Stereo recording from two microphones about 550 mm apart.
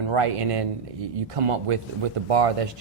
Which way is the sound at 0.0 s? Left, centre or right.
Right.